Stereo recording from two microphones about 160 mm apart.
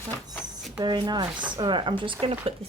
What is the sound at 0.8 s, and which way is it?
Speech, 25° right (ahead or behind).